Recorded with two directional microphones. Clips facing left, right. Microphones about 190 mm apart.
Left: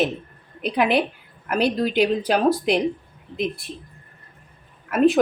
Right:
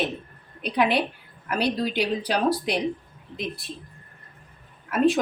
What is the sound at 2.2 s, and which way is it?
Speech, 45° left (ahead or behind).